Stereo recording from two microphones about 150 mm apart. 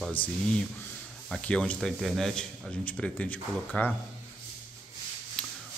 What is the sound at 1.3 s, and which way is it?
Speech, 5° left (ahead or behind).